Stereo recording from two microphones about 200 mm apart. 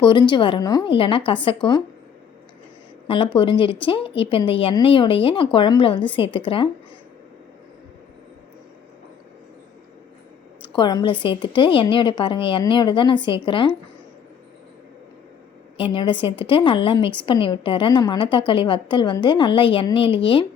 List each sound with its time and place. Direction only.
0.0 s a woman's voice: 25° left (ahead or behind)
3.1 s a woman's voice: 25° left (ahead or behind)
10.7 s a woman's voice: 20° left (ahead or behind)
15.8 s a woman's voice: 25° left (ahead or behind)